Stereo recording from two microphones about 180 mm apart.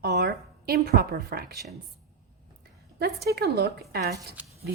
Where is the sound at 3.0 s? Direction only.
60° right (ahead or behind).